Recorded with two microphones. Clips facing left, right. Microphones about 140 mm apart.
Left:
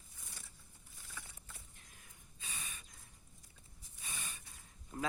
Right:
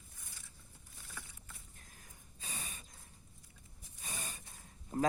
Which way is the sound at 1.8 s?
40° right (ahead or behind).